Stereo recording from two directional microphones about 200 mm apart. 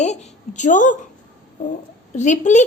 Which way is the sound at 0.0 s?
35° left (ahead or behind).